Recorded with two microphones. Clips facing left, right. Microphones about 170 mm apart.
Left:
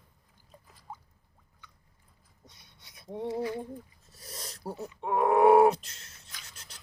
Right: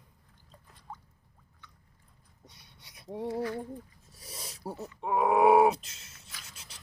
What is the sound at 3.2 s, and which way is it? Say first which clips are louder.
Female singing: left 1 dB; 15° left (ahead or behind).